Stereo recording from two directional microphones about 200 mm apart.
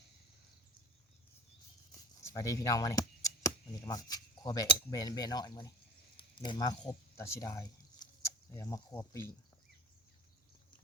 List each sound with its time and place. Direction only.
2.3 s speech: 15° left (ahead or behind)